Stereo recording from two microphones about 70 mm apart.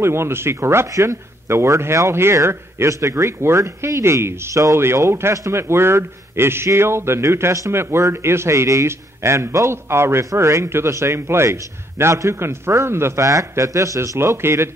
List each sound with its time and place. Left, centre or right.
0.0 s speech: right